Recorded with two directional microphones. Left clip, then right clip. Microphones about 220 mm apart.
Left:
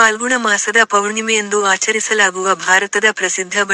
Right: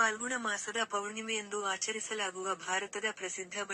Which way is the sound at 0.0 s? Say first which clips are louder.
Left 19 dB; 45° left (ahead or behind).